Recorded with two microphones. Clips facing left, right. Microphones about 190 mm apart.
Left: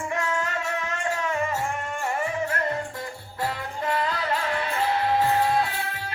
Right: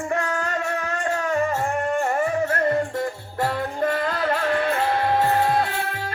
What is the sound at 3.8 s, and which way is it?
Music, 50° right (ahead or behind).